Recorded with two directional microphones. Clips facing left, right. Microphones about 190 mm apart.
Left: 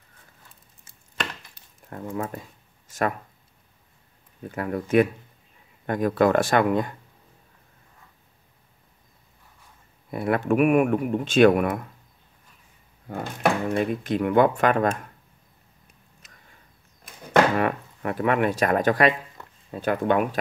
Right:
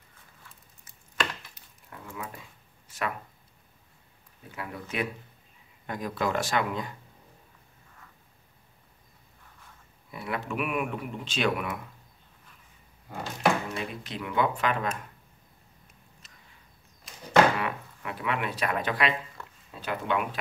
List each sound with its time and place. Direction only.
1.9 s speech: 45° left (ahead or behind)
4.4 s speech: 50° left (ahead or behind)
10.1 s speech: 50° left (ahead or behind)
13.1 s speech: 55° left (ahead or behind)
17.0 s a sound: 50° left (ahead or behind)
19.4 s a sound: 20° left (ahead or behind)
19.7 s speech: 50° left (ahead or behind)